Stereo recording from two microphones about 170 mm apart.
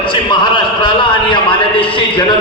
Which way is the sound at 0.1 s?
30° left (ahead or behind).